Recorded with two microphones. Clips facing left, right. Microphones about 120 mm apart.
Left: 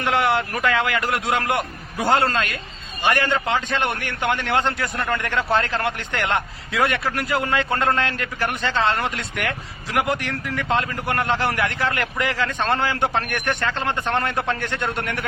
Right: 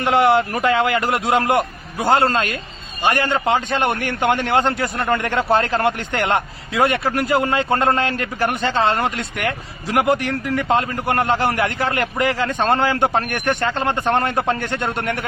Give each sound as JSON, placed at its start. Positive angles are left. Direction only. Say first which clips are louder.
{"t": 0.0, "sound": "a man's voice", "louder": "right 5 dB", "side_deg": -35}